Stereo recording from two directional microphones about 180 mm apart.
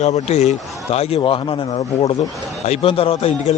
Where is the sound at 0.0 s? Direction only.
35° left (ahead or behind).